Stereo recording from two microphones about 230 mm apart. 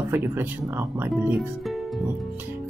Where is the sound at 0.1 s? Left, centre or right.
Centre.